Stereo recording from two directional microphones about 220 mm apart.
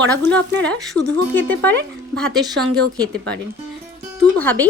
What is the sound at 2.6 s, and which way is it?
Speech, 65° right (ahead or behind).